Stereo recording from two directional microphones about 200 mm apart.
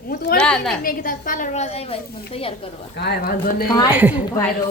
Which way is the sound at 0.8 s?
45° left (ahead or behind).